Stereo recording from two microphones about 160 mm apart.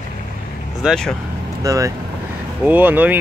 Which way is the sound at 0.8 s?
5° left (ahead or behind).